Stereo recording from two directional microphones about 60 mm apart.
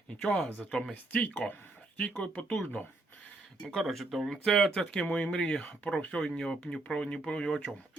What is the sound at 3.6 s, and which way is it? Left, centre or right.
Speech, centre.